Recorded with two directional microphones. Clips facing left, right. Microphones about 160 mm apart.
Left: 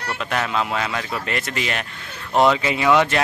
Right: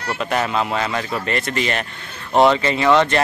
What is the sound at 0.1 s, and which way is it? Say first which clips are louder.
Speech: right 3 dB; 5° right (ahead or behind).